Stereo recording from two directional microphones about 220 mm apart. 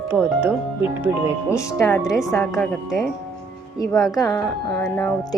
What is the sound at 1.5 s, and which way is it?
Speech, 10° left (ahead or behind).